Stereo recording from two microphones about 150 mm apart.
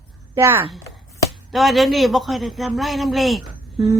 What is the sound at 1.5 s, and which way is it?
Speech, centre (ahead or behind).